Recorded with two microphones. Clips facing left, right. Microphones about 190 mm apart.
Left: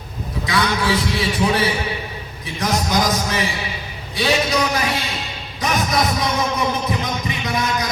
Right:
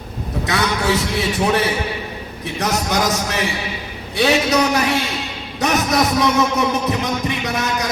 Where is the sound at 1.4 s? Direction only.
55° right (ahead or behind).